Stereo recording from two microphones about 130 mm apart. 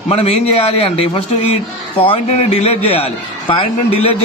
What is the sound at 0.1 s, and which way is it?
A man's voice, 50° left (ahead or behind).